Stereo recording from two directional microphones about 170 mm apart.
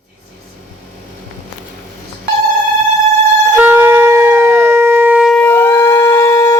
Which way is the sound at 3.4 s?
15° right (ahead or behind).